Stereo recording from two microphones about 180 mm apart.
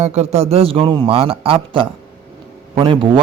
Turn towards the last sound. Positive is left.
turn(degrees=-25)  # may be behind; listen again after turning